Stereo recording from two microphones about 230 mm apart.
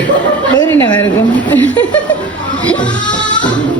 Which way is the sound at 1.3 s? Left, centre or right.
Centre.